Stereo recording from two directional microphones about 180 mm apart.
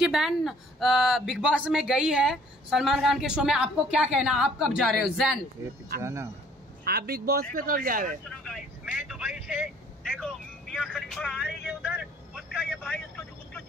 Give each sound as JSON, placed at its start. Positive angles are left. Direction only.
{"t": 0.0, "sound": "a woman's voice", "side_deg": 0}
{"t": 5.6, "sound": "speech", "side_deg": -15}
{"t": 6.8, "sound": "a man's voice", "side_deg": -60}
{"t": 8.3, "sound": "a woman's voice", "side_deg": 0}
{"t": 11.6, "sound": "vehicle", "side_deg": -5}